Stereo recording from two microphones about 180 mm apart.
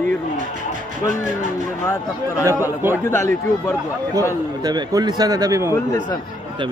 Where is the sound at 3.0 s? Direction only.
15° left (ahead or behind).